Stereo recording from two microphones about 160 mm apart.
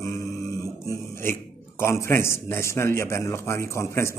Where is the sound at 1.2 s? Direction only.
15° left (ahead or behind).